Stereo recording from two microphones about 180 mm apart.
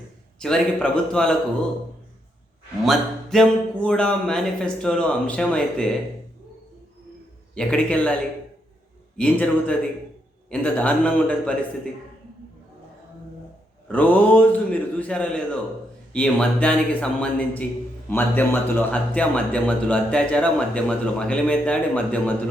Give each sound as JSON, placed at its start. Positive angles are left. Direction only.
{"t": 0.3, "sound": "speech", "side_deg": 5}
{"t": 2.8, "sound": "speech", "side_deg": 0}
{"t": 7.5, "sound": "speech", "side_deg": 5}
{"t": 13.8, "sound": "speech", "side_deg": 10}